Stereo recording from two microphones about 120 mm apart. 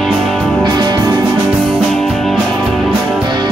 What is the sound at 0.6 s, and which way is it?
Music, 35° right (ahead or behind).